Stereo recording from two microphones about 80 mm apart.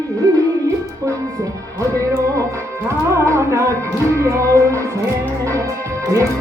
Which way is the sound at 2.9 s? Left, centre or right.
Right.